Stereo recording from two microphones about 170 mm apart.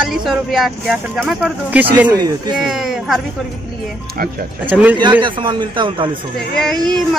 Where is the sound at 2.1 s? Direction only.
25° right (ahead or behind).